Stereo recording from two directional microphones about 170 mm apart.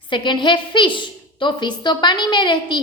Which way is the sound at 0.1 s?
30° left (ahead or behind).